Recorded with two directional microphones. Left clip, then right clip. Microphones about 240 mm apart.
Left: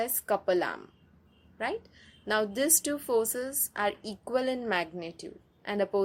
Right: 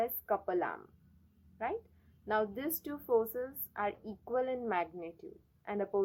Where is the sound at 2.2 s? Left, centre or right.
Left.